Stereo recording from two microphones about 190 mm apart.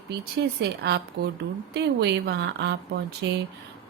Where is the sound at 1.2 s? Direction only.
60° right (ahead or behind).